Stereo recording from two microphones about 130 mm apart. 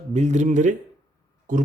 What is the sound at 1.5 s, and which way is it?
Speech, 90° right.